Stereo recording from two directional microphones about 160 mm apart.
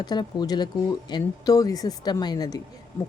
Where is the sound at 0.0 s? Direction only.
25° left (ahead or behind).